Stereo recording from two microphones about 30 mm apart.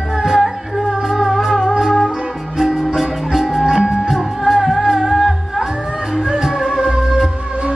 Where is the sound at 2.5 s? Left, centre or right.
Centre.